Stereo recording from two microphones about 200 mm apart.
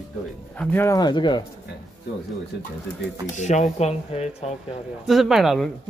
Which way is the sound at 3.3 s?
35° left (ahead or behind).